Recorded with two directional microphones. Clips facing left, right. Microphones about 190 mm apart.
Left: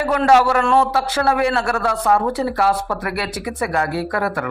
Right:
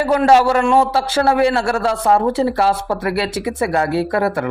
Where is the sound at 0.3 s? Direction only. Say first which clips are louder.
Right 1 dB; 30° right (ahead or behind).